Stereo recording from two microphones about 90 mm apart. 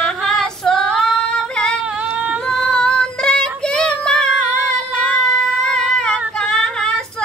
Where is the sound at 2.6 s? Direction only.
10° left (ahead or behind).